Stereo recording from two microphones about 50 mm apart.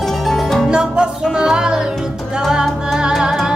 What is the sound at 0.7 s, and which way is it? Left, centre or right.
Music, centre.